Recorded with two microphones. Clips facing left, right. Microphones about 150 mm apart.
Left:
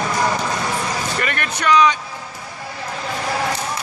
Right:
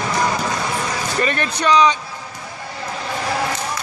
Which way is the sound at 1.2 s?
30° right (ahead or behind).